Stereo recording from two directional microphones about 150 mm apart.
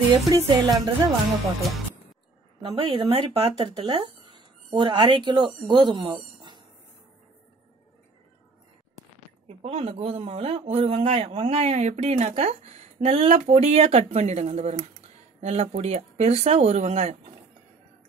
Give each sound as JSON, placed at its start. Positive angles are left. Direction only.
{"t": 0.5, "sound": "music", "side_deg": -30}
{"t": 2.6, "sound": "speech", "side_deg": -35}
{"t": 9.5, "sound": "speech", "side_deg": -45}